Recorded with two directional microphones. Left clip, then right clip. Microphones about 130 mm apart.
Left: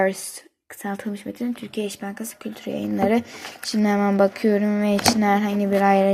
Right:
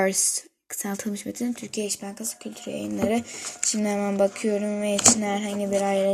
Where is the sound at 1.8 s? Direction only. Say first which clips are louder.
Left 2 dB; centre (ahead or behind).